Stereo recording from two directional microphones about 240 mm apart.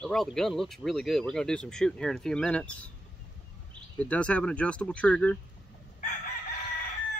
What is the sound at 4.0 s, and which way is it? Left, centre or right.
Speech, centre.